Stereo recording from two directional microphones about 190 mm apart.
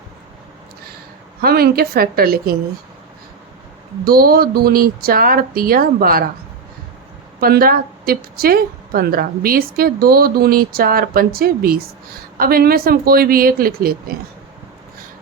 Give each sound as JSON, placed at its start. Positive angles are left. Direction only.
{"t": 1.4, "sound": "a woman's voice", "side_deg": -55}
{"t": 4.0, "sound": "a woman's voice", "side_deg": -50}
{"t": 7.3, "sound": "a woman's voice", "side_deg": -50}